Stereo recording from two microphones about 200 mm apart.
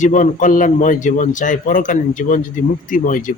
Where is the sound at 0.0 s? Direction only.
40° left (ahead or behind).